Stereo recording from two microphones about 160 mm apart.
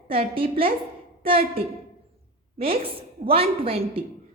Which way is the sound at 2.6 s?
35° right (ahead or behind).